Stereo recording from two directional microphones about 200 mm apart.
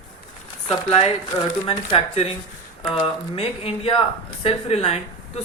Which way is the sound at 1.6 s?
25° left (ahead or behind).